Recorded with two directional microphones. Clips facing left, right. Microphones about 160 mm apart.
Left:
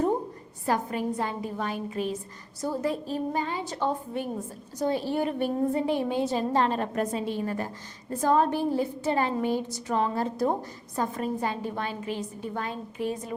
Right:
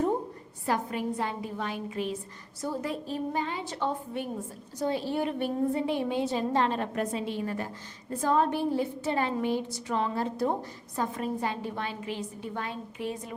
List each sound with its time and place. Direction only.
0.6 s a woman's voice: 40° left (ahead or behind)